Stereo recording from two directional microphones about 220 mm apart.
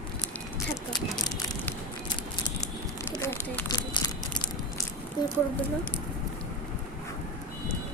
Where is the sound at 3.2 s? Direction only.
15° left (ahead or behind).